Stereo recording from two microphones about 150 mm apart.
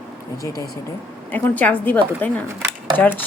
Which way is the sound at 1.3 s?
10° left (ahead or behind).